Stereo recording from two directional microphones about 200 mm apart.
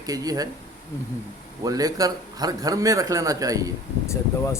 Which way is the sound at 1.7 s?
20° right (ahead or behind).